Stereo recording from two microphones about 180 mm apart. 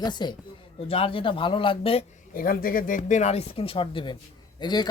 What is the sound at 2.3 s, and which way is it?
Speech, 50° left (ahead or behind).